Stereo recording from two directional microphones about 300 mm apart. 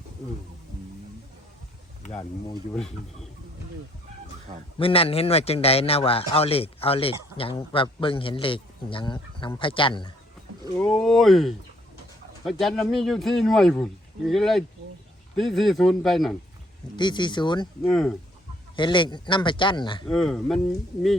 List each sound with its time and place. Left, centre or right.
2.0 s speech: centre
4.8 s a man's voice: centre
10.8 s speech: centre
17.0 s a man's voice: centre
17.8 s speech: centre
18.8 s a man's voice: centre
20.1 s speech: centre